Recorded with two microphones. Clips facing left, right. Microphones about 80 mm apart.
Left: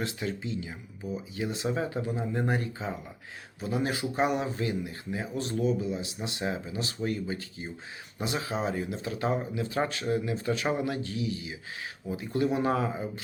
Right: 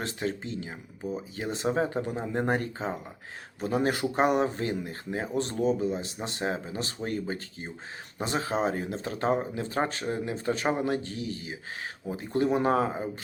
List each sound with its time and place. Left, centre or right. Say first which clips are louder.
0.0 s speech: right 1 dB; right